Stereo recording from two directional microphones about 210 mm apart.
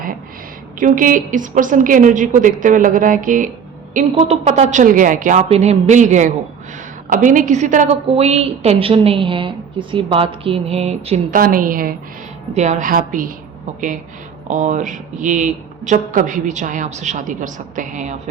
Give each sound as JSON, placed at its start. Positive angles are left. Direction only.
{"t": 0.8, "sound": "a woman's voice", "side_deg": -40}
{"t": 11.3, "sound": "a woman's voice", "side_deg": -40}
{"t": 14.4, "sound": "a woman's voice", "side_deg": -35}